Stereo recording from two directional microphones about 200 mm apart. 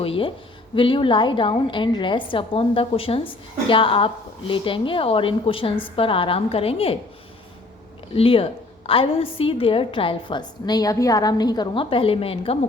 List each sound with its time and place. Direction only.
0.0 s a woman's voice: 25° left (ahead or behind)
8.1 s a woman's voice: 30° left (ahead or behind)